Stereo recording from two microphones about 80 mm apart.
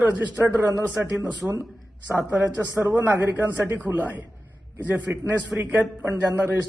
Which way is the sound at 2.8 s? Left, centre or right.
Right.